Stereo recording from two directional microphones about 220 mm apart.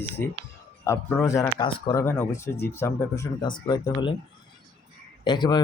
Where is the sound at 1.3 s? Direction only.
20° left (ahead or behind).